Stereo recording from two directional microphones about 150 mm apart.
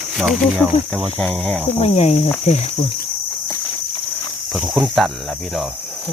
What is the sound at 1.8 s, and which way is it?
Cricket, 45° left (ahead or behind).